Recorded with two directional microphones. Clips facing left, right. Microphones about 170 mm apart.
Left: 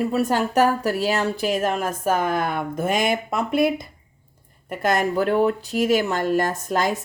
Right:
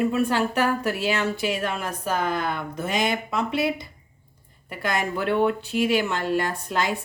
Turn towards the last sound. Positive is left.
turn(degrees=45)  # may be behind; listen again after turning